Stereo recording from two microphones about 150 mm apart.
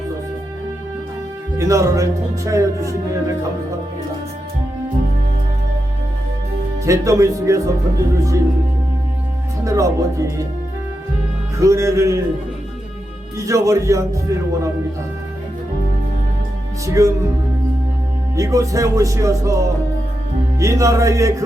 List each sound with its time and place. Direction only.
1.5 s speech: 20° right (ahead or behind)
6.8 s speech: 20° right (ahead or behind)
9.6 s speech: 20° right (ahead or behind)
11.5 s speech: 20° right (ahead or behind)
13.3 s speech: 20° right (ahead or behind)
16.8 s speech: 20° right (ahead or behind)
18.3 s speech: 20° right (ahead or behind)